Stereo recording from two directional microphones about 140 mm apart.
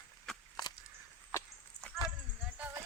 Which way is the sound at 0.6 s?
30° left (ahead or behind).